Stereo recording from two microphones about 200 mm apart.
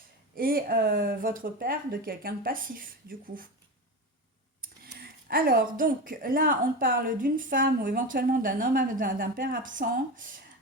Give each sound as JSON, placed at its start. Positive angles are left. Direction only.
{"t": 0.3, "sound": "a woman's voice", "side_deg": -45}
{"t": 4.6, "sound": "a woman's voice", "side_deg": -45}